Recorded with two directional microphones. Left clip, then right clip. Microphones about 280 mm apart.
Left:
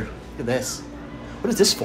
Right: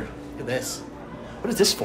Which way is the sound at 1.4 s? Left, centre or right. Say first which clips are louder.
Left 2 dB; centre.